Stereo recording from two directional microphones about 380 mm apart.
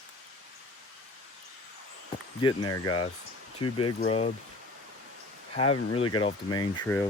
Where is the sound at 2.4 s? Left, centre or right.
Centre.